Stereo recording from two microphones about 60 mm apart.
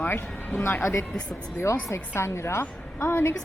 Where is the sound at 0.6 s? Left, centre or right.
Left.